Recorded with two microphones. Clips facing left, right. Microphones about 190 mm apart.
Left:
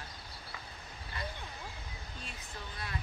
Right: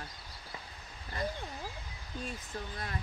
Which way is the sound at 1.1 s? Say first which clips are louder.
Right 6 dB; 45° right (ahead or behind).